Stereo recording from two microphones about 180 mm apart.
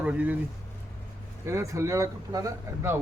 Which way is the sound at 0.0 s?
10° right (ahead or behind).